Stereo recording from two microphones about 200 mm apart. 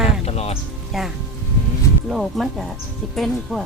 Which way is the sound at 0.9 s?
Centre (ahead or behind).